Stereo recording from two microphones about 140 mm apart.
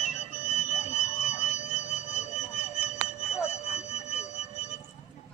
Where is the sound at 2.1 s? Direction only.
55° left (ahead or behind).